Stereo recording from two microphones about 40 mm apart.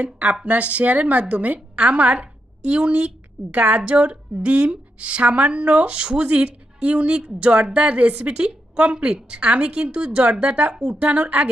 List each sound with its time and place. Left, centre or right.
0.0 s a woman's voice: right
9.4 s a woman's voice: right
10.8 s a woman's voice: right
11.1 s a woman's voice: right